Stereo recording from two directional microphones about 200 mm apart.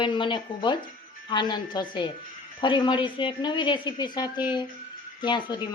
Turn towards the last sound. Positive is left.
turn(degrees=25)  # may be behind; listen again after turning